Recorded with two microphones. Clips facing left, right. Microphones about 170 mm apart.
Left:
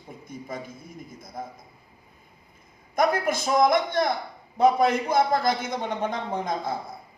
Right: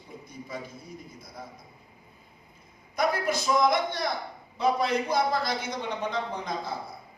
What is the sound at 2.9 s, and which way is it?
A man's voice, 50° left (ahead or behind).